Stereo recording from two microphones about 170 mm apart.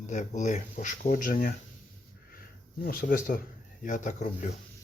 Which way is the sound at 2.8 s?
60° left (ahead or behind).